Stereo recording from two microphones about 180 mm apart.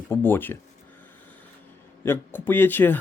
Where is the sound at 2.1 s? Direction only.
10° left (ahead or behind).